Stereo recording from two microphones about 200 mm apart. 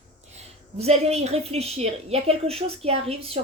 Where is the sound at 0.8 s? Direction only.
30° right (ahead or behind).